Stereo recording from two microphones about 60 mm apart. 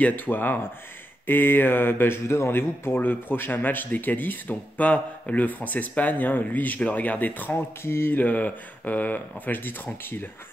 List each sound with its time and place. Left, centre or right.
0.0 s speech: left
7.5 s speech: left